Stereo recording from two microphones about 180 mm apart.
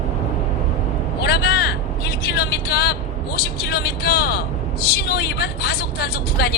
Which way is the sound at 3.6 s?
60° left (ahead or behind).